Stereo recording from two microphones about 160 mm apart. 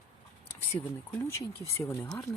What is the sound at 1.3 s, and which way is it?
Speech, 15° left (ahead or behind).